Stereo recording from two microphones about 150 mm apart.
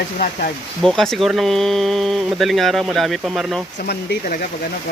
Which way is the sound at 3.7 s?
80° left.